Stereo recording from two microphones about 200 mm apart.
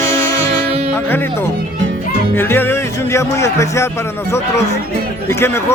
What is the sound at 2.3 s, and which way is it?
Music, 10° left (ahead or behind).